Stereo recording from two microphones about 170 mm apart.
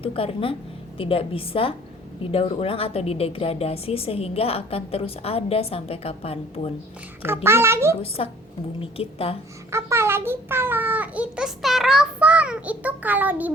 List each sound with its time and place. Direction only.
0.0 s a woman's voice: 35° left (ahead or behind)
7.4 s a child's voice: 15° right (ahead or behind)
8.0 s a woman's voice: 35° left (ahead or behind)
9.6 s a child's voice: 15° right (ahead or behind)